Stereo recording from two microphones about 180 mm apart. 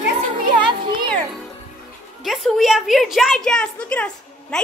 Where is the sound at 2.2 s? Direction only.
Centre (ahead or behind).